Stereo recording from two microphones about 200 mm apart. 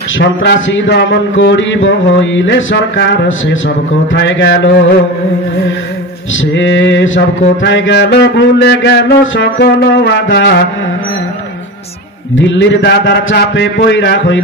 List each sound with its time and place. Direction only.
0.2 s a man's voice: 60° left (ahead or behind)
6.4 s mantra: 70° left (ahead or behind)
7.6 s a man's voice: 65° left (ahead or behind)
12.4 s a man's voice: 70° left (ahead or behind)